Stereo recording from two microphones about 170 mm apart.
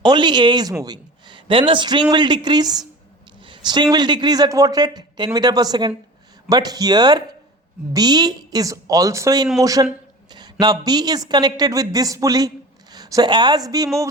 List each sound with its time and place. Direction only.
0.0 s speech: 25° right (ahead or behind)